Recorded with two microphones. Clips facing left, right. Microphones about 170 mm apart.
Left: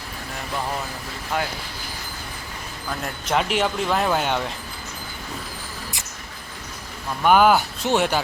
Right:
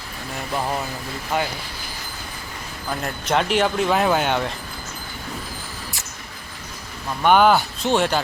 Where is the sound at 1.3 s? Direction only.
5° right (ahead or behind).